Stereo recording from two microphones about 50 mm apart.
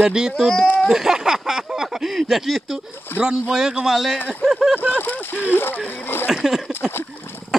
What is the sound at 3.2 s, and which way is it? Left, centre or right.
Speech, centre.